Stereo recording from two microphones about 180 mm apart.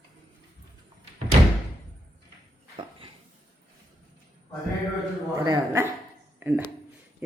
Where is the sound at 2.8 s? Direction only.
30° right (ahead or behind).